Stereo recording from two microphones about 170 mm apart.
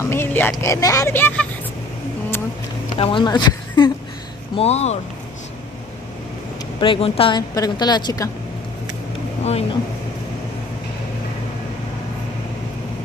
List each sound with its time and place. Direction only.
0.0 s speech: 15° left (ahead or behind)
3.0 s speech: 30° left (ahead or behind)
4.6 s speech: 40° left (ahead or behind)
6.8 s a woman's voice: 30° left (ahead or behind)
9.4 s speech: 40° left (ahead or behind)